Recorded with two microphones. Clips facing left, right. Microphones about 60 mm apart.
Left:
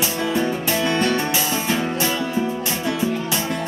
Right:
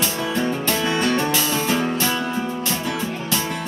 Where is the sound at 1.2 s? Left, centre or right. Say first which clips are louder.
Right 1 dB; centre.